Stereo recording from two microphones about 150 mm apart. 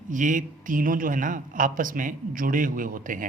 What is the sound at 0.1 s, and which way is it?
Speech, 60° right (ahead or behind).